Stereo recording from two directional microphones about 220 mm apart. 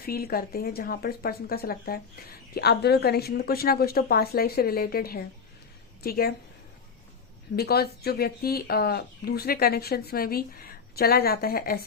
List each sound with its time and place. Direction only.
0.0 s speech: 40° left (ahead or behind)
7.5 s speech: 45° left (ahead or behind)